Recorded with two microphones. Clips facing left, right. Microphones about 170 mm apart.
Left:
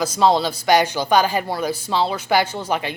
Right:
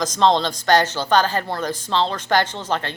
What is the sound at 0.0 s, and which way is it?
Speech, 10° left (ahead or behind).